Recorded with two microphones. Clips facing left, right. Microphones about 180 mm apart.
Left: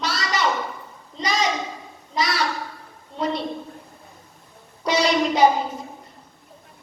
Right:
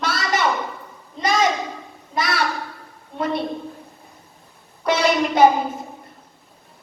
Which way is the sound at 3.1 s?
55° right (ahead or behind).